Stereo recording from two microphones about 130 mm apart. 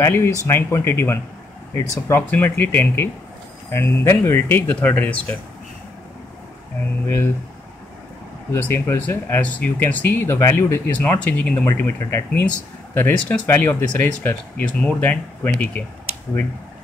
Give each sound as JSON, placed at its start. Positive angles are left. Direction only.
{"t": 0.0, "sound": "speech", "side_deg": 20}
{"t": 8.5, "sound": "speech", "side_deg": 15}